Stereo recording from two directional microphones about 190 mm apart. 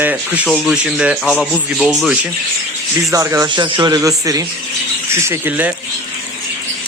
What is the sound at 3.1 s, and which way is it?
Speech, 15° right (ahead or behind).